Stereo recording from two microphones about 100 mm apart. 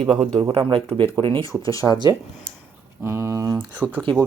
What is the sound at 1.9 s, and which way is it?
Speech, 50° left (ahead or behind).